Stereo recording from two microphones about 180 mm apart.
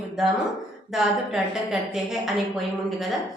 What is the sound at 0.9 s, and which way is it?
A woman's voice, centre (ahead or behind).